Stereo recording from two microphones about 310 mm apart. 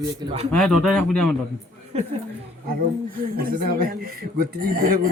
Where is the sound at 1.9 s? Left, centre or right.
Centre.